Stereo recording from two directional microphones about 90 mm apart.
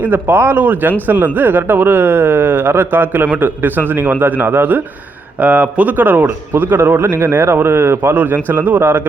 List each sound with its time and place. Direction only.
0.0 s speech: 20° right (ahead or behind)